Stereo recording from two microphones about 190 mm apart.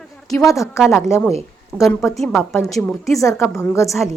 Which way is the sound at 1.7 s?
10° left (ahead or behind).